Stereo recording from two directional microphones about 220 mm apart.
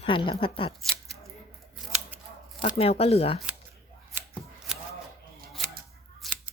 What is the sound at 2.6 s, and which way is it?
Speech, 25° left (ahead or behind).